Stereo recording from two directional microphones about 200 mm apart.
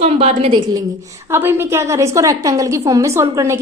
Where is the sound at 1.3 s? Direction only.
10° right (ahead or behind).